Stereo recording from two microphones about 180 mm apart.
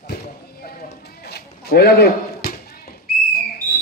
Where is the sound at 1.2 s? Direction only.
60° left (ahead or behind).